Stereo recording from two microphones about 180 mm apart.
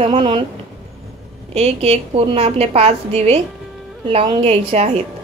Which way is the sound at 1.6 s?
35° right (ahead or behind).